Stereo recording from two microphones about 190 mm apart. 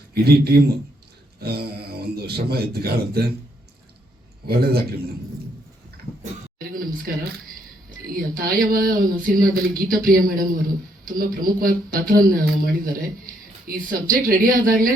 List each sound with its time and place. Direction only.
0.1 s speech: 55° right (ahead or behind)
4.4 s speech: 55° right (ahead or behind)
6.6 s a sound: 50° right (ahead or behind)
7.9 s speech: 50° right (ahead or behind)